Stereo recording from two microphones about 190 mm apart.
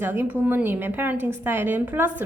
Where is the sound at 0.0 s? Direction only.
10° right (ahead or behind).